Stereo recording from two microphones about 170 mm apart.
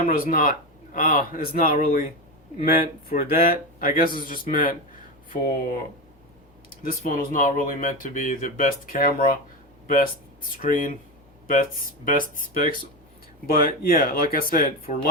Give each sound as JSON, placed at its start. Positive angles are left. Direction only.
{"t": 0.1, "sound": "speech", "side_deg": 55}
{"t": 6.8, "sound": "speech", "side_deg": 55}
{"t": 12.0, "sound": "speech", "side_deg": 55}